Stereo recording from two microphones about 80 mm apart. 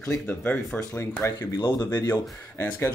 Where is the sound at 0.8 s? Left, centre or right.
Left.